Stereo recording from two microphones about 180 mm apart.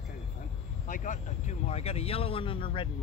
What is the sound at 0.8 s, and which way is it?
Speech, 45° left (ahead or behind).